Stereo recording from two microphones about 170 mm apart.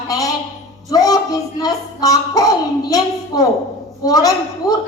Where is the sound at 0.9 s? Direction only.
20° left (ahead or behind).